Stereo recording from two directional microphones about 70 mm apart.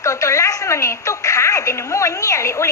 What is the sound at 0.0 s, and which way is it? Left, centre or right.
A woman's voice, left.